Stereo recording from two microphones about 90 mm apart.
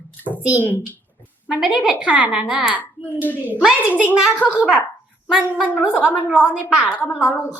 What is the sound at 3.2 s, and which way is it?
Speech, 20° left (ahead or behind).